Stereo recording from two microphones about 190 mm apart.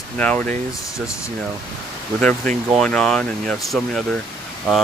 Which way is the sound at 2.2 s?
5° left (ahead or behind).